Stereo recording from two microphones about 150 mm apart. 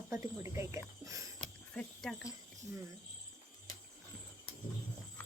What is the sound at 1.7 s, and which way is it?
Speech, 5° left (ahead or behind).